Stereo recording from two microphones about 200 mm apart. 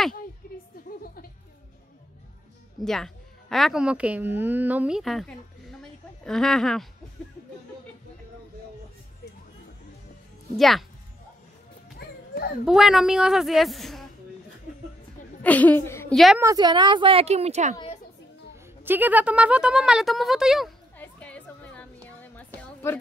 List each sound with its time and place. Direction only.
0.4 s a sound: 45° left (ahead or behind)
0.8 s music: 45° left (ahead or behind)
2.8 s a woman's voice: centre (ahead or behind)
10.5 s speech: centre (ahead or behind)
12.6 s speech: centre (ahead or behind)
15.4 s a woman's voice: 10° left (ahead or behind)
16.3 s speech: 20° right (ahead or behind); by 17.7 s 35° right (ahead or behind)
18.9 s speech: 10° right (ahead or behind)
21.0 s music: 5° left (ahead or behind)